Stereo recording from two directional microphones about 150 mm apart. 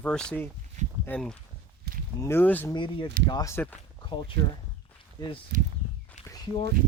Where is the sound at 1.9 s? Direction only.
90° right.